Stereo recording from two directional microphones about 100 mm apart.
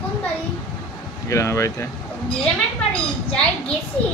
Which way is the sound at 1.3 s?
30° left (ahead or behind).